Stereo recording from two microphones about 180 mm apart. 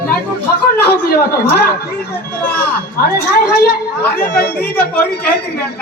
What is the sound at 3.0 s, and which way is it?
Speech, 60° left (ahead or behind).